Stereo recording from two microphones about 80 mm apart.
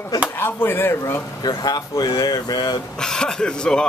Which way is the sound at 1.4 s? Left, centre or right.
Left.